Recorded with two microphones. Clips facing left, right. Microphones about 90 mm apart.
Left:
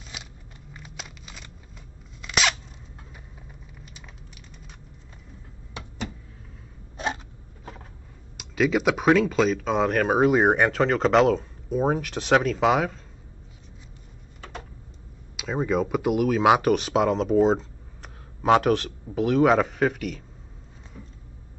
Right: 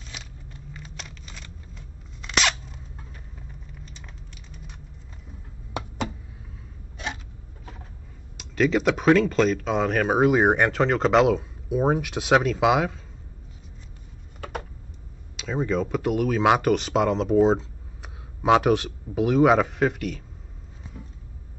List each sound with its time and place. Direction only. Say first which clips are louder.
0.8 s crunch: even; 5° left (ahead or behind)
3.4 s vehicle: right 2 dB; 5° left (ahead or behind)
5.7 s a sound: right 6 dB; 65° right (ahead or behind)
8.4 s speech: right 1 dB; 5° left (ahead or behind)
15.3 s speech: left 1 dB; 5° left (ahead or behind)